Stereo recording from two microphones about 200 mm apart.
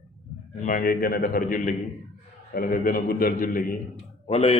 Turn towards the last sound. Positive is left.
turn(degrees=30)  # may be behind; listen again after turning